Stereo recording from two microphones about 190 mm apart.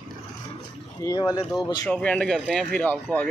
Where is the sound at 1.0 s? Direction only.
20° left (ahead or behind).